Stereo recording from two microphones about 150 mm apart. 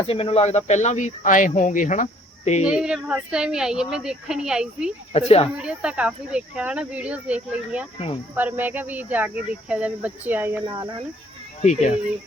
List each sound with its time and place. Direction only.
0.0 s speech: 40° left (ahead or behind)
2.6 s speech: 5° right (ahead or behind)
5.1 s speech: 40° left (ahead or behind)
5.5 s speech: 5° right (ahead or behind)
7.9 s speech: 40° left (ahead or behind)
8.4 s speech: 10° right (ahead or behind)
11.6 s speech: 50° left (ahead or behind)